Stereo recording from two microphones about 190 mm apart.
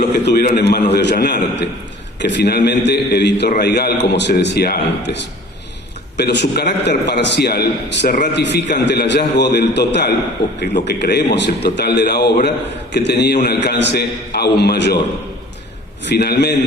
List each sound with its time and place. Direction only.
0.3 s a man's voice: 60° left (ahead or behind)
8.4 s a man's voice: 60° left (ahead or behind)
16.0 s a man's voice: 60° left (ahead or behind)